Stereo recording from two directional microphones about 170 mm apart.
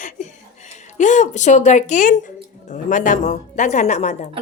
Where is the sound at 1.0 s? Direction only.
45° left (ahead or behind).